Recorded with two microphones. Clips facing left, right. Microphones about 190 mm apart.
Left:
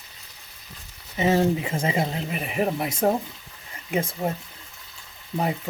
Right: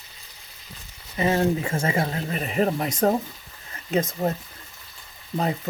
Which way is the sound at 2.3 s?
10° left (ahead or behind).